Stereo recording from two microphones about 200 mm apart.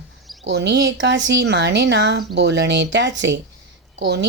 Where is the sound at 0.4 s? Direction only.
60° right (ahead or behind).